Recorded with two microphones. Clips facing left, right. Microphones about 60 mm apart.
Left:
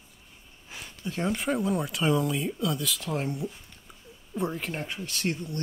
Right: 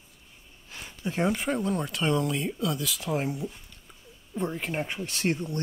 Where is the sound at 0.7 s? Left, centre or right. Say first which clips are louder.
Even; centre.